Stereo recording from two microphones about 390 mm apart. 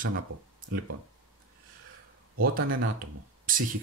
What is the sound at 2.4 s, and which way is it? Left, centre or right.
Speech, right.